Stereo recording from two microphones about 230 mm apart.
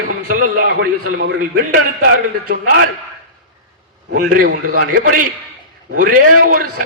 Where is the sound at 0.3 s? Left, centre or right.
Right.